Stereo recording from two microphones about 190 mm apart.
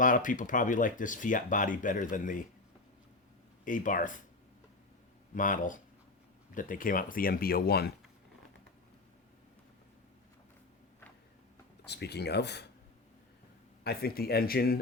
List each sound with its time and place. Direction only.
0.0 s speech: 45° left (ahead or behind)
3.6 s speech: 45° left (ahead or behind)
5.3 s speech: 45° left (ahead or behind)
11.9 s speech: 60° left (ahead or behind)
13.8 s speech: 55° left (ahead or behind)